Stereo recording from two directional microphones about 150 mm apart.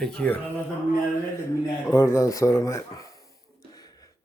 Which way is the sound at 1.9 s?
20° left (ahead or behind).